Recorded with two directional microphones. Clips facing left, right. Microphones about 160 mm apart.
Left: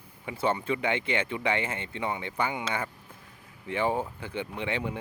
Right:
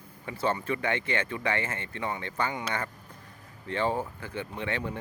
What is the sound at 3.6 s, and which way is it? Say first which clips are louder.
Speech: left 1 dB; 15° left (ahead or behind).